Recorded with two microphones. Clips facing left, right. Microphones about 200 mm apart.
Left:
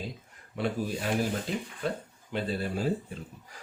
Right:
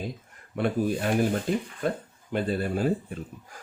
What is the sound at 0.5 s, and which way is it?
Speech, 55° right (ahead or behind).